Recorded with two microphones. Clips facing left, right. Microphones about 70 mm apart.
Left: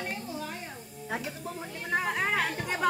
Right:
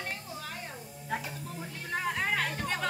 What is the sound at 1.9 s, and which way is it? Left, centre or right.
Music, centre.